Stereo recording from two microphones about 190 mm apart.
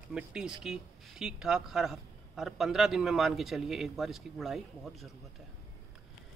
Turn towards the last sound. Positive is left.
turn(degrees=0)  # may be behind; listen again after turning